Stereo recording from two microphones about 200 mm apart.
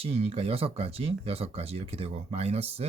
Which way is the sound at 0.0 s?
30° right (ahead or behind).